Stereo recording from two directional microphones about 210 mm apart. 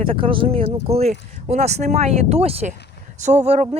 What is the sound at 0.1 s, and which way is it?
Speech, 25° right (ahead or behind).